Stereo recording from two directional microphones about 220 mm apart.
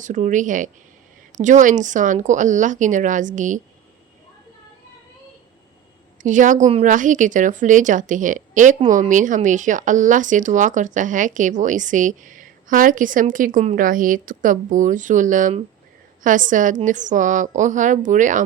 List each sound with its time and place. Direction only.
0.0 s a woman's voice: 35° right (ahead or behind)
6.2 s a woman's voice: 35° right (ahead or behind)